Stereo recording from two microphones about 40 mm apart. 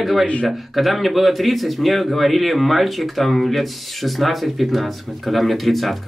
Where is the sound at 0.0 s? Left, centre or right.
Centre.